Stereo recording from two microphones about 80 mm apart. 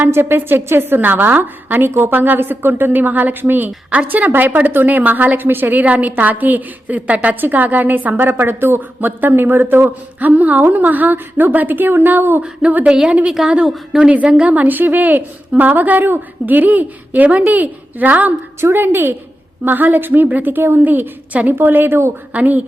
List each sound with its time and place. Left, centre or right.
0.0 s a woman's voice: right
12.4 s a woman's voice: centre
14.1 s a woman's voice: centre
22.3 s a woman's voice: centre